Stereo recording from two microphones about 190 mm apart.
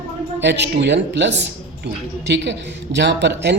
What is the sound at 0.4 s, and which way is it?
A man's voice, 65° right (ahead or behind).